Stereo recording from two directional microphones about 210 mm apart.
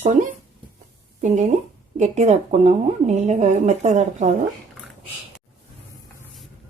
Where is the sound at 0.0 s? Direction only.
35° right (ahead or behind).